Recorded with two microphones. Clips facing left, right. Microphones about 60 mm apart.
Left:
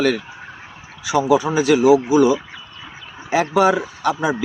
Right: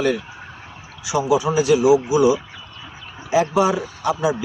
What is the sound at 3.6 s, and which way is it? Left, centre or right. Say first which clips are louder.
Speech: left 3 dB; left.